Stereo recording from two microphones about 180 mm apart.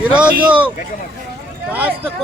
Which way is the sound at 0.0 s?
5° right (ahead or behind).